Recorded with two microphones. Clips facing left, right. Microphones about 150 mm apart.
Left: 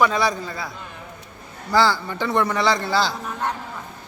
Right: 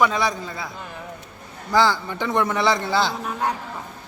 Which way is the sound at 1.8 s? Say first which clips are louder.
Even; 15° right (ahead or behind).